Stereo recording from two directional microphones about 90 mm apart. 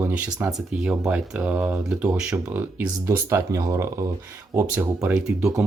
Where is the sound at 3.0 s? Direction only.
35° right (ahead or behind).